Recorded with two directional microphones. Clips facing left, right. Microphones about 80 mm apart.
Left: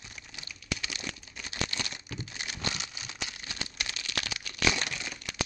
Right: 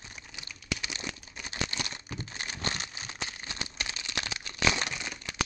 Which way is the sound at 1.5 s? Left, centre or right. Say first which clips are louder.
Even; right.